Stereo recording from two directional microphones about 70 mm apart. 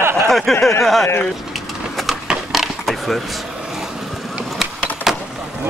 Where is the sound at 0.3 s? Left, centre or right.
Centre.